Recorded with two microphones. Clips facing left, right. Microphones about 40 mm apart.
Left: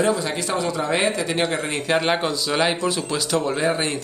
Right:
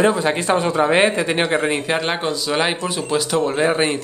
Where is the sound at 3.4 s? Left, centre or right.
Right.